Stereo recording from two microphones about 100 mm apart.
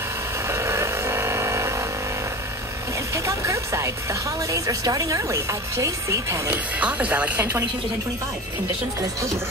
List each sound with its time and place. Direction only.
0.5 s vehicle: 25° right (ahead or behind)
3.2 s a woman's voice: 30° right (ahead or behind)
6.5 s speech: 15° right (ahead or behind)